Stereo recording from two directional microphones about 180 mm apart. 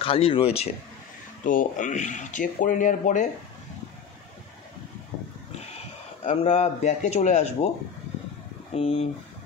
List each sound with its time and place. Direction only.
0.0 s speech: 30° left (ahead or behind)
1.4 s speech: 50° left (ahead or behind)
6.2 s speech: 40° left (ahead or behind)
8.7 s speech: 35° left (ahead or behind)